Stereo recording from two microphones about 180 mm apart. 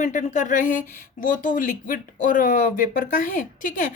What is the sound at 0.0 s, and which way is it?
Speech, 45° left (ahead or behind).